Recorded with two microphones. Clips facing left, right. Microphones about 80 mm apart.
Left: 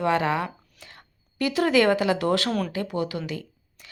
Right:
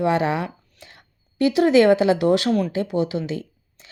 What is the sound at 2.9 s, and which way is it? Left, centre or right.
Speech, right.